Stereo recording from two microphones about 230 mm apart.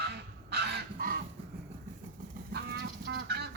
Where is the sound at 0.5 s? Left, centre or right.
Right.